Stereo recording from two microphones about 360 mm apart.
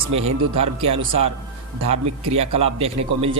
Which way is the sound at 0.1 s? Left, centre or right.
Centre.